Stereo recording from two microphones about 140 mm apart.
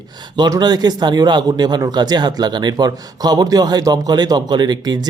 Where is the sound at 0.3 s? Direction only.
30° right (ahead or behind).